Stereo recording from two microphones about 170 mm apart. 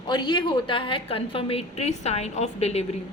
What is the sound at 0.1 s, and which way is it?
A woman's voice, 25° left (ahead or behind).